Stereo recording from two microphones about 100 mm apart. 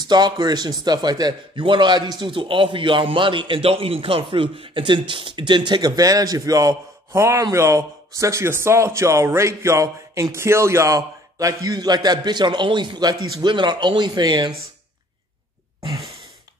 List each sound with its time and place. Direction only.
0.1 s speech: 45° right (ahead or behind)
5.7 s a man's voice: 45° right (ahead or behind)